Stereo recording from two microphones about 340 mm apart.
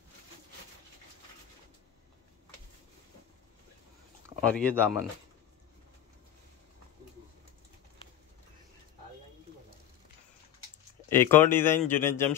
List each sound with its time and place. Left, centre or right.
4.4 s speech: centre
11.1 s speech: centre